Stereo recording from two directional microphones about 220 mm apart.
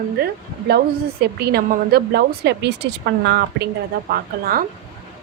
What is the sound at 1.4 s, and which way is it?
A woman's voice, 45° right (ahead or behind).